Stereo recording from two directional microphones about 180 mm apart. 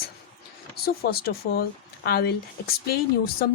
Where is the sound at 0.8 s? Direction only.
60° left (ahead or behind).